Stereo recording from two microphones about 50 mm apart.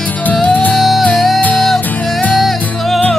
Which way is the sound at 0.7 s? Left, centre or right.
Centre.